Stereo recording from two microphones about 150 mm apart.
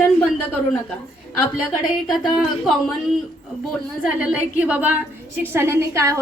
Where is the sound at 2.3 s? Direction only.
Centre (ahead or behind).